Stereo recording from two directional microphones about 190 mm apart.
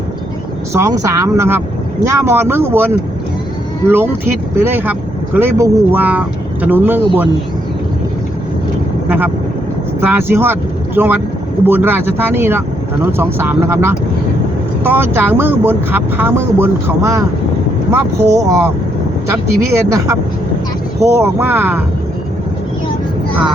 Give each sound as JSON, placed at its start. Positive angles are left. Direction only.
{"t": 0.7, "sound": "speech", "side_deg": -15}
{"t": 9.0, "sound": "vehicle", "side_deg": -10}
{"t": 10.0, "sound": "speech", "side_deg": -10}